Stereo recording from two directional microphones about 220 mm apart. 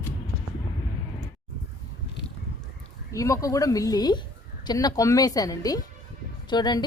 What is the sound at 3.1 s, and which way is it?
Speech, 15° left (ahead or behind).